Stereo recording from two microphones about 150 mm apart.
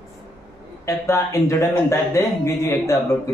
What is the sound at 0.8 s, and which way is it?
Speech, 20° left (ahead or behind).